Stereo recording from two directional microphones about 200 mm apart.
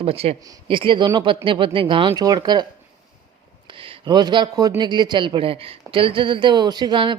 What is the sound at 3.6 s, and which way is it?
Speech, 25° right (ahead or behind).